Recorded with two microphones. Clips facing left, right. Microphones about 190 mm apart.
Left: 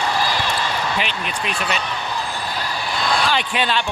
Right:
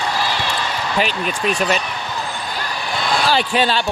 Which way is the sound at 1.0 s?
45° right (ahead or behind).